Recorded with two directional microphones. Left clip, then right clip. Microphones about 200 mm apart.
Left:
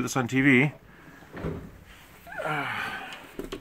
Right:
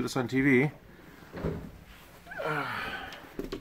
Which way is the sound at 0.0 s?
35° left (ahead or behind).